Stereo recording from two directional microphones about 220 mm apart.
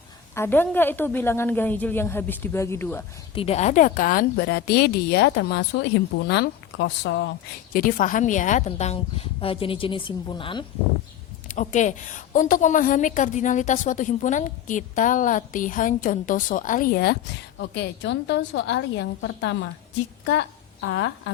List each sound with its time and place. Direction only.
0.3 s a woman's voice: 10° left (ahead or behind)
3.3 s a woman's voice: 30° left (ahead or behind); by 7.3 s 55° left (ahead or behind)
7.7 s a woman's voice: 40° left (ahead or behind); by 10.7 s 20° left (ahead or behind)
11.4 s a woman's voice: 35° left (ahead or behind)
17.6 s a woman's voice: 55° left (ahead or behind)
20.8 s a woman's voice: 55° left (ahead or behind)